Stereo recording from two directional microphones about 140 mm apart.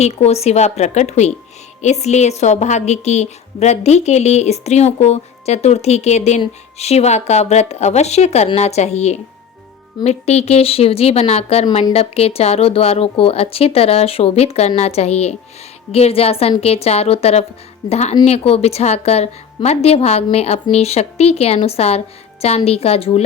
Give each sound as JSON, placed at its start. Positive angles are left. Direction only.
{"t": 0.0, "sound": "a woman's voice", "side_deg": 50}